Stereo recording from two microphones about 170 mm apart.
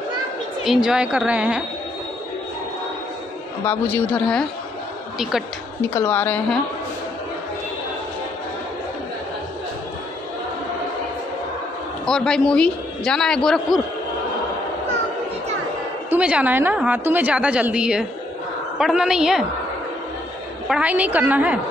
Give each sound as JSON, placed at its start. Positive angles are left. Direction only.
{"t": 0.8, "sound": "a man's voice", "side_deg": -5}
{"t": 3.6, "sound": "a woman's voice", "side_deg": 10}
{"t": 5.9, "sound": "a woman's voice", "side_deg": 10}
{"t": 12.1, "sound": "a man's voice", "side_deg": 5}
{"t": 16.1, "sound": "a woman's voice", "side_deg": -5}
{"t": 20.6, "sound": "a woman's voice", "side_deg": -5}